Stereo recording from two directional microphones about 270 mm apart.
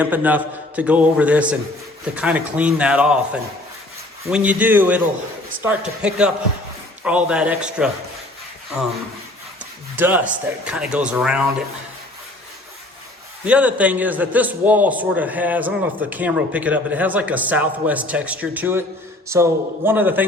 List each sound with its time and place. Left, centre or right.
0.0 s a man's voice: centre
9.9 s a man's voice: centre
13.4 s a man's voice: centre